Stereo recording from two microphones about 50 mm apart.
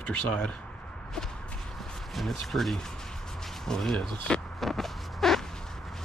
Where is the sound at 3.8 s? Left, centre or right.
Centre.